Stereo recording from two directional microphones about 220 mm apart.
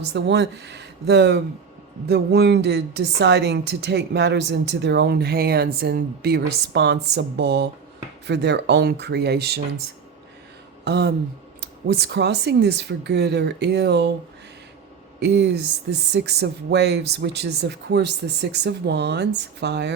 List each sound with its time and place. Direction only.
0.1 s a woman's voice: 50° right (ahead or behind)
10.8 s a woman's voice: 50° right (ahead or behind)
15.2 s a woman's voice: 50° right (ahead or behind)